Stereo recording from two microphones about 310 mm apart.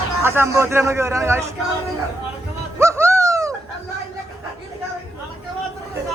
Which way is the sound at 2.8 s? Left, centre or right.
Centre.